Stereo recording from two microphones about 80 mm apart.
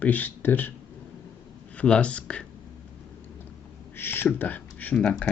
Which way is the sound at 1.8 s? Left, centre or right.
Centre.